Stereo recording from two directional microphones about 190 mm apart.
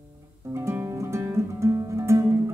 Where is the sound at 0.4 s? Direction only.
15° right (ahead or behind).